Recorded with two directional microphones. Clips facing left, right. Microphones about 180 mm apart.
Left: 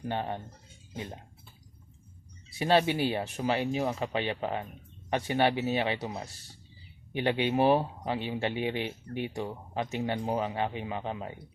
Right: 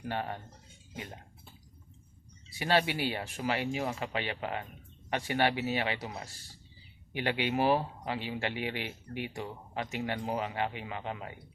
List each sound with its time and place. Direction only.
0.1 s speech: 25° left (ahead or behind)
2.6 s speech: 25° left (ahead or behind)